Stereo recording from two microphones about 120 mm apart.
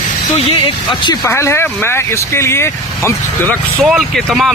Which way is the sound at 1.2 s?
20° left (ahead or behind).